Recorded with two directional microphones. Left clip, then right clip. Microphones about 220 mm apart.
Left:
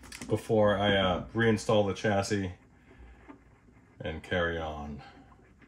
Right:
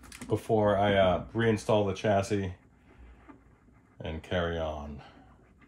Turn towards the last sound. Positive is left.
turn(degrees=-25)  # may be behind; listen again after turning